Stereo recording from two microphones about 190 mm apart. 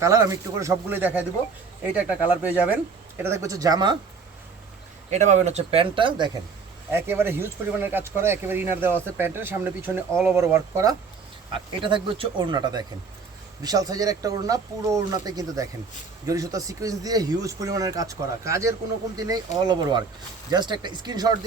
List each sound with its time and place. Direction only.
0.0 s a man's voice: 15° right (ahead or behind)
5.1 s speech: 40° right (ahead or behind)
6.9 s a man's voice: 10° right (ahead or behind)
11.5 s a man's voice: 25° right (ahead or behind)